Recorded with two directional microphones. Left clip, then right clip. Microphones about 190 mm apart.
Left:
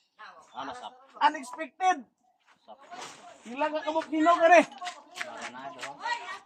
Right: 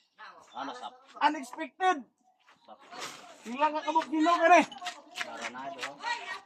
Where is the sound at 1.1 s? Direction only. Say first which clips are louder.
Left 2 dB; 15° left (ahead or behind).